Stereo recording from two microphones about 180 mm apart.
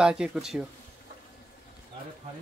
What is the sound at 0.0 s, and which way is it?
Speech, 5° right (ahead or behind).